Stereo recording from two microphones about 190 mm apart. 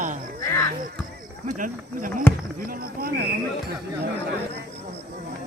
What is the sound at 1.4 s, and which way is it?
Speech, 45° right (ahead or behind).